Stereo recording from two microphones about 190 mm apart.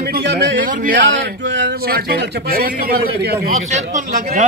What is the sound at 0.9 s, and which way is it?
Speech, 70° right (ahead or behind).